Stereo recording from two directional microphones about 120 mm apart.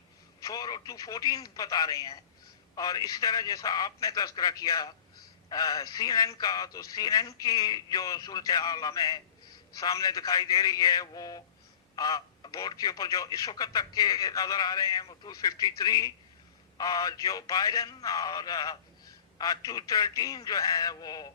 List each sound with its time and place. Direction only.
0.3 s speech: 30° left (ahead or behind)